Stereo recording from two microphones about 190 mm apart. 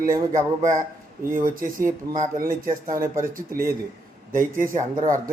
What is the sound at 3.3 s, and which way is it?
Speech, 50° right (ahead or behind).